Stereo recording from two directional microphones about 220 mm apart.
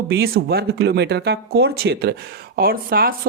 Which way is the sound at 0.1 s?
45° right (ahead or behind).